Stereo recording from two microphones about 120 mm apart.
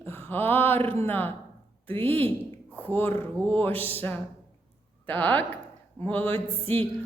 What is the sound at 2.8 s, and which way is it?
Speech, 15° left (ahead or behind).